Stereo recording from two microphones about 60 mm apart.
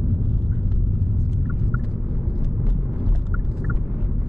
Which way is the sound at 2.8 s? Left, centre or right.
Centre.